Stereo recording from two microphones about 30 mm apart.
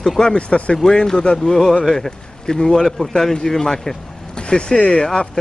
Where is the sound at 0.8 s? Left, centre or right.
Centre.